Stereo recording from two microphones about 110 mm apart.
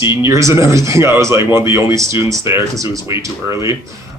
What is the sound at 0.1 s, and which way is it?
Speech, 25° right (ahead or behind).